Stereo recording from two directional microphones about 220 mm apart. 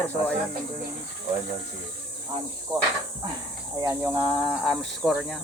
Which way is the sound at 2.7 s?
20° right (ahead or behind).